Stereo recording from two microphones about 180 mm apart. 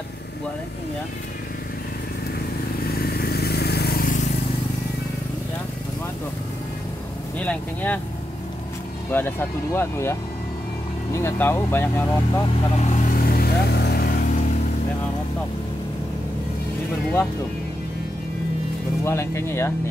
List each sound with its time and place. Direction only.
2.9 s vehicle: 60° left (ahead or behind)
7.3 s speech: 10° left (ahead or behind)
9.1 s speech: 15° left (ahead or behind)
12.7 s vehicle: 45° left (ahead or behind)
19.0 s speech: 15° left (ahead or behind)